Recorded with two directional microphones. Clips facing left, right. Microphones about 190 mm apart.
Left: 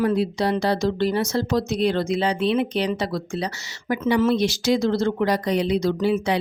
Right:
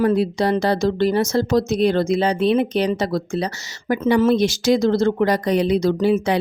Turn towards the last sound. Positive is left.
turn(degrees=-45)  # may be behind; listen again after turning